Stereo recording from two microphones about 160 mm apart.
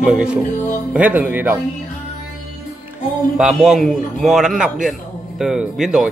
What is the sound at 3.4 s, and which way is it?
Speech, centre (ahead or behind).